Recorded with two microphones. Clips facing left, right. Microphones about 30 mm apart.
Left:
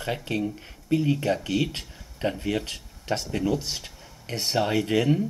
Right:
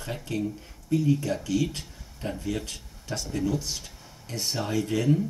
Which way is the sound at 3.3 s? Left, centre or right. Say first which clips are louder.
Right 1 dB; left.